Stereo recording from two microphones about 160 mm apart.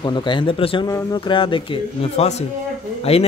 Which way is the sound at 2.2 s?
45° left (ahead or behind).